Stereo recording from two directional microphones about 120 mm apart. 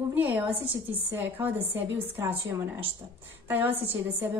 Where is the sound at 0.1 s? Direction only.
15° right (ahead or behind).